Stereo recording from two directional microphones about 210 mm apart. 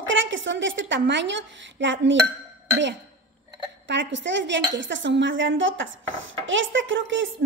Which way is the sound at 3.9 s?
60° right (ahead or behind).